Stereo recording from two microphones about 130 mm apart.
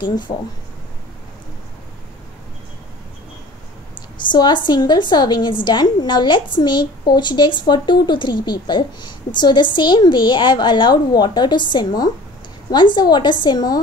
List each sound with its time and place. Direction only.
4.3 s a woman's voice: 35° left (ahead or behind)